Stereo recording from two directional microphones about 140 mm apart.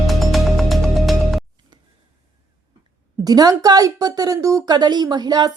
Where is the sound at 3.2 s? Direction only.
25° right (ahead or behind).